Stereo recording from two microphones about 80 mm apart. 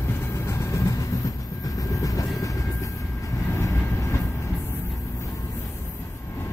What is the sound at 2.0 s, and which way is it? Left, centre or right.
Vehicle, left.